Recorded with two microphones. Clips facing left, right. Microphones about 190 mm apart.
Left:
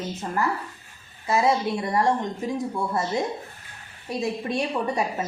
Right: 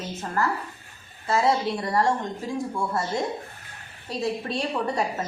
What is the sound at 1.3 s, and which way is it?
Speech, 15° left (ahead or behind).